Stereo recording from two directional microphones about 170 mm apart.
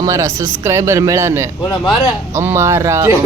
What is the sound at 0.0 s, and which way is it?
Speech, 20° right (ahead or behind).